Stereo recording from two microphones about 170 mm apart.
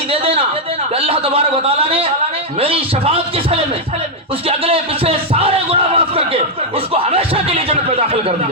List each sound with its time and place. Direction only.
0.1 s a man's voice: 35° right (ahead or behind)